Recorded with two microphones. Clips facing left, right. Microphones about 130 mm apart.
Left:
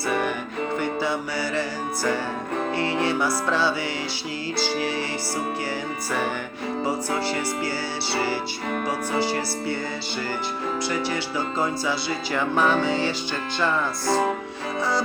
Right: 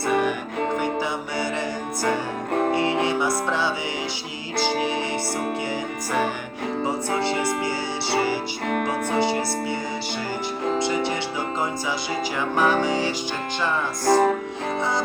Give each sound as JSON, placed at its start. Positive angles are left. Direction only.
{"t": 0.8, "sound": "music", "side_deg": -15}
{"t": 2.7, "sound": "music", "side_deg": -20}
{"t": 4.8, "sound": "speech", "side_deg": -20}
{"t": 6.8, "sound": "music", "side_deg": -25}
{"t": 8.1, "sound": "speech", "side_deg": -20}
{"t": 10.8, "sound": "music", "side_deg": -25}
{"t": 12.5, "sound": "music", "side_deg": -15}
{"t": 14.0, "sound": "music", "side_deg": -50}